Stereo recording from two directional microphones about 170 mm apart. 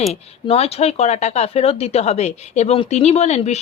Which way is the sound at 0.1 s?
35° left (ahead or behind).